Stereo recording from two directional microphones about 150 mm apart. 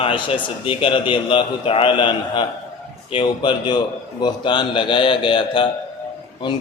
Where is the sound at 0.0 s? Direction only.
35° left (ahead or behind).